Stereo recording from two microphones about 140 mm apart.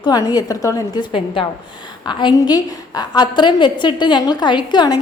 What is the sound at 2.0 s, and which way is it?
A woman's voice, 30° left (ahead or behind).